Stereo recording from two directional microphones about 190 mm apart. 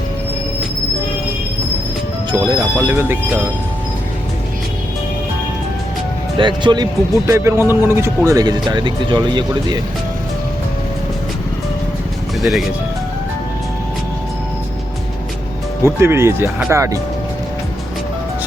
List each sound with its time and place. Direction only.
2.5 s speech: 10° right (ahead or behind)
6.3 s speech: 25° right (ahead or behind)
12.4 s speech: centre (ahead or behind)
15.8 s speech: 15° right (ahead or behind)